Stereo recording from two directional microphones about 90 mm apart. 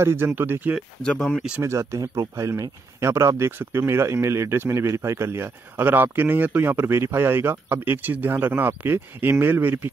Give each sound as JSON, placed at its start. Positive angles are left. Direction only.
{"t": 0.0, "sound": "speech", "side_deg": -30}
{"t": 1.0, "sound": "speech", "side_deg": 10}
{"t": 1.6, "sound": "speech", "side_deg": -30}